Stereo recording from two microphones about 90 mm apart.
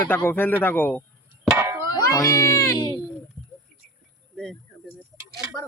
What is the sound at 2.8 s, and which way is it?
Speech, 55° left (ahead or behind).